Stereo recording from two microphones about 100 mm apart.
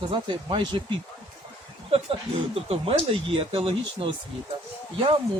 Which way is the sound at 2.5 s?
75° right (ahead or behind).